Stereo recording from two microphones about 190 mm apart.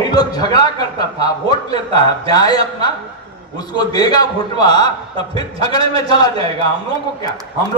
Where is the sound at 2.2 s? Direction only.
20° left (ahead or behind).